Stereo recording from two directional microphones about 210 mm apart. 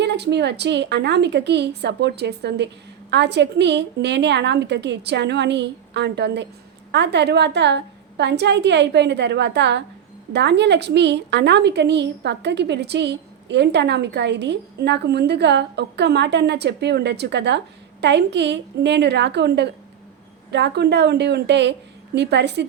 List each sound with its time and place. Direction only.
0.0 s a woman's voice: 55° right (ahead or behind)